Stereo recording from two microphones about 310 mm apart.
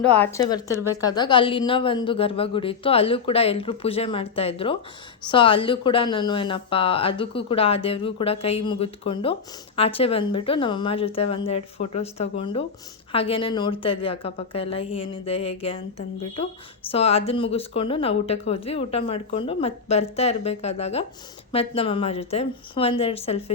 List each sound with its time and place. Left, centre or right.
0.1 s a woman's voice: centre
0.7 s speech: centre
1.0 s a woman's voice: centre